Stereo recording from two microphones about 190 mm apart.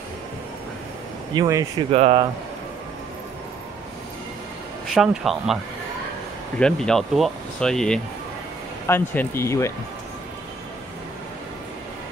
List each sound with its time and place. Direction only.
1.3 s speech: 20° right (ahead or behind)
1.9 s speech: 35° right (ahead or behind)
4.9 s speech: 5° right (ahead or behind)
6.6 s speech: 5° left (ahead or behind)